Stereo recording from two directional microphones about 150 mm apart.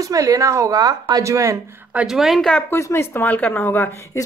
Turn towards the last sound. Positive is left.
turn(degrees=15)  # may be behind; listen again after turning